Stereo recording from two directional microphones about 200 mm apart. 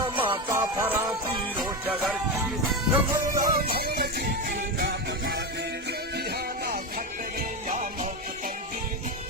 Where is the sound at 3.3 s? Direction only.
45° right (ahead or behind).